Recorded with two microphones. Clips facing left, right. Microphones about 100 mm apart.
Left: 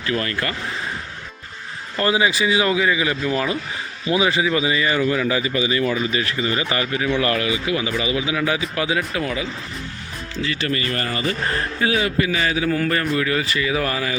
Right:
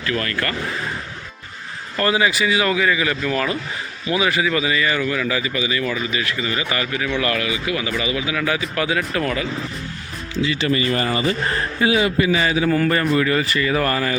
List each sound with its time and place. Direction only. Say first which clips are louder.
0.0 s speech: even; 25° left (ahead or behind)
2.0 s speech: even; 20° left (ahead or behind)
10.4 s speech: right 4 dB; 15° right (ahead or behind)
11.8 s a man's voice: right 3 dB; 5° right (ahead or behind)